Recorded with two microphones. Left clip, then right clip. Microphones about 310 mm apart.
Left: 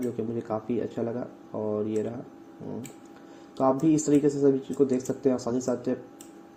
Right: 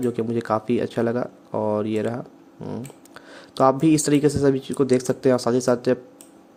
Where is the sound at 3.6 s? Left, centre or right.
Right.